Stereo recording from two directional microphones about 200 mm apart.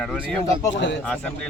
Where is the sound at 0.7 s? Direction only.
60° left (ahead or behind).